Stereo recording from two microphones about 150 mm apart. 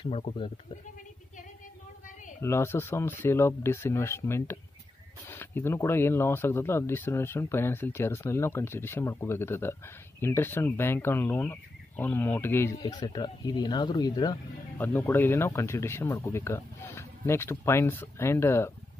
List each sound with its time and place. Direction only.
0.0 s speech: 40° left (ahead or behind)
2.4 s speech: 15° left (ahead or behind)
12.9 s speech: 30° left (ahead or behind)
14.8 s speech: 15° left (ahead or behind)